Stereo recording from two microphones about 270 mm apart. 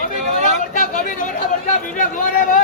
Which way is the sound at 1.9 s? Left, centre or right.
Left.